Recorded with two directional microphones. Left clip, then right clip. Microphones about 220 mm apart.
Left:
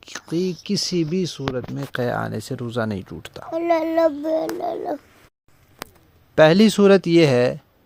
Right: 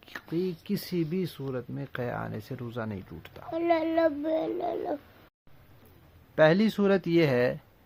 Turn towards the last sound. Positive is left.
turn(degrees=35)  # may be behind; listen again after turning